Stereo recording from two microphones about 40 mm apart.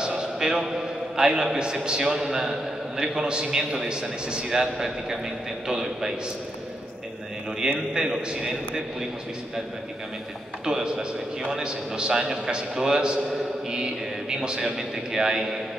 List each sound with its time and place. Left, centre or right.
0.0 s a man's voice: centre
7.6 s a man's voice: centre
10.6 s a man's voice: centre